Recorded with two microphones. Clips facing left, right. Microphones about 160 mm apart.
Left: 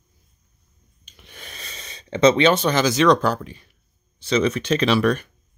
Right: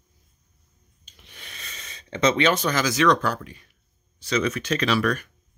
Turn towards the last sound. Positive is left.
turn(degrees=25)  # may be behind; listen again after turning